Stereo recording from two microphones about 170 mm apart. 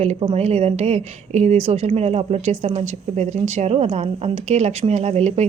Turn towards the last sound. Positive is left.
turn(degrees=-40)  # may be behind; listen again after turning